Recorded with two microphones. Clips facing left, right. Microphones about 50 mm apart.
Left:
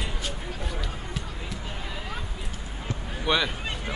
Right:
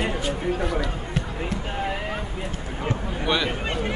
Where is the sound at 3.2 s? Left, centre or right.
Centre.